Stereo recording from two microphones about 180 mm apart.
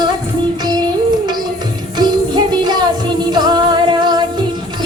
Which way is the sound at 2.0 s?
25° right (ahead or behind).